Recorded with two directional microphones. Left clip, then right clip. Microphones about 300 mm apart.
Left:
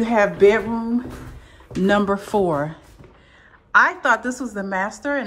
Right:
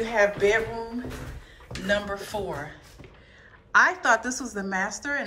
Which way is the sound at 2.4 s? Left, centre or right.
Left.